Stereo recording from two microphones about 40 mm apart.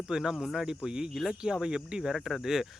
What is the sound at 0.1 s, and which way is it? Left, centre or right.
Speech, centre.